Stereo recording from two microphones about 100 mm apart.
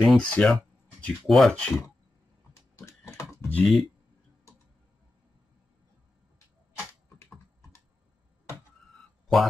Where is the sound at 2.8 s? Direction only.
30° left (ahead or behind).